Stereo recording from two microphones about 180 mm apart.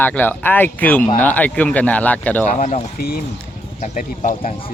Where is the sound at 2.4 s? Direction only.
40° left (ahead or behind).